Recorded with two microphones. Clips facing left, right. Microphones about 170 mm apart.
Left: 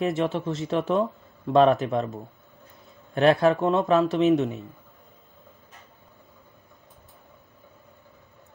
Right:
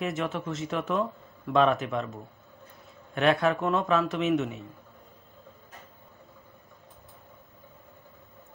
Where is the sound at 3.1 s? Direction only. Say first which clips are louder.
Left 5 dB; 35° left (ahead or behind).